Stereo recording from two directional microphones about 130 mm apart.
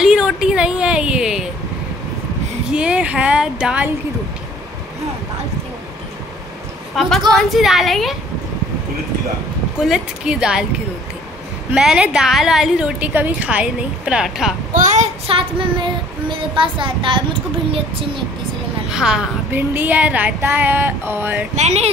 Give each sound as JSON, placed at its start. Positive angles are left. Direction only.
{"t": 0.0, "sound": "a sound", "side_deg": -5}
{"t": 2.7, "sound": "a woman's voice", "side_deg": -10}
{"t": 7.0, "sound": "a woman's voice", "side_deg": 0}
{"t": 9.8, "sound": "a woman's voice", "side_deg": -5}
{"t": 11.7, "sound": "a woman's voice", "side_deg": -5}
{"t": 14.7, "sound": "a woman's voice", "side_deg": -70}
{"t": 15.2, "sound": "child singing", "side_deg": -45}
{"t": 18.9, "sound": "a woman's voice", "side_deg": -5}
{"t": 21.5, "sound": "speech", "side_deg": -55}